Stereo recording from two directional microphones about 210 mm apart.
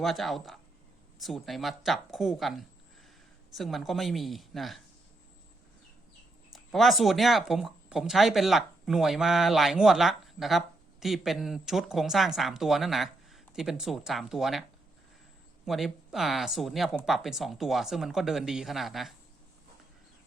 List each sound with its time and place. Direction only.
0.0 s speech: centre (ahead or behind)
6.5 s speech: centre (ahead or behind)
15.6 s speech: centre (ahead or behind)